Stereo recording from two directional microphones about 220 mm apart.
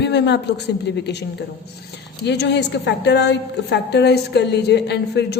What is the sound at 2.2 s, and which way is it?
A woman's voice, 50° left (ahead or behind).